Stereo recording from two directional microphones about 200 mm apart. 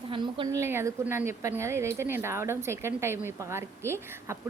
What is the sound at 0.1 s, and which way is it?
Speech, 25° right (ahead or behind).